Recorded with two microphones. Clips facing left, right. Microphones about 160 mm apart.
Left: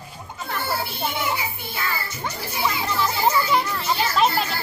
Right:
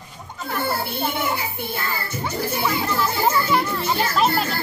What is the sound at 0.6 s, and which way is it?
Music, 55° right (ahead or behind).